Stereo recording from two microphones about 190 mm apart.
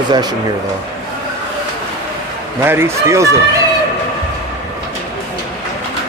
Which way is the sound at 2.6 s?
10° right (ahead or behind).